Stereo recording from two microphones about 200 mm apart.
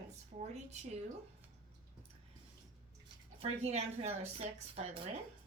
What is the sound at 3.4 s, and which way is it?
A woman's voice, 30° right (ahead or behind).